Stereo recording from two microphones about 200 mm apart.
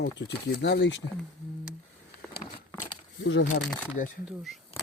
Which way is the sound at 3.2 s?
65° left (ahead or behind).